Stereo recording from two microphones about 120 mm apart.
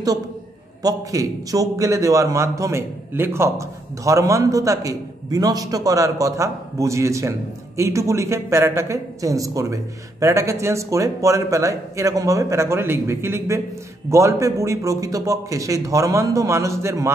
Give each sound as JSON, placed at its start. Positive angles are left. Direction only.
{"t": 0.8, "sound": "a man's voice", "side_deg": -30}